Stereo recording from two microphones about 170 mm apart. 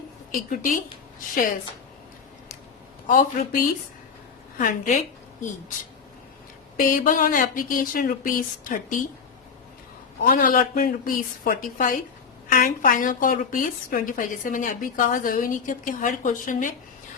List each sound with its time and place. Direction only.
0.3 s a woman's voice: 55° left (ahead or behind)
3.1 s a woman's voice: 50° left (ahead or behind)
6.7 s a woman's voice: 50° left (ahead or behind)
10.2 s a woman's voice: 55° left (ahead or behind)